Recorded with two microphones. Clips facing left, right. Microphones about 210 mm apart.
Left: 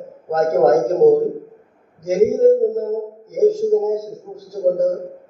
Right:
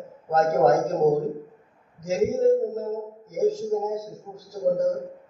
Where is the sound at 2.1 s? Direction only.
50° left (ahead or behind).